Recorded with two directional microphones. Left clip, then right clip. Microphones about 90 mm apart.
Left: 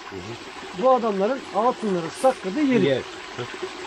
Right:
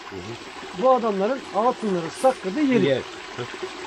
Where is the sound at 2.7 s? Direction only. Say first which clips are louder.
Even; 35° right (ahead or behind).